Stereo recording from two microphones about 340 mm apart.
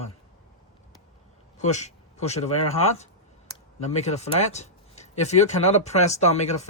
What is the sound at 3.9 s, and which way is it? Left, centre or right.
Speech, centre.